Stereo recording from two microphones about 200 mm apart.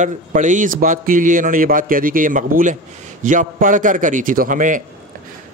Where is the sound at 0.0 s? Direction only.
40° right (ahead or behind).